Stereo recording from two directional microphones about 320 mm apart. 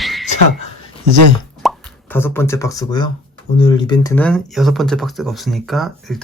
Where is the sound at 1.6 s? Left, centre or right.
Centre.